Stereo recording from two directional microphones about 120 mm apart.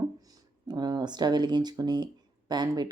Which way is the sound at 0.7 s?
35° right (ahead or behind).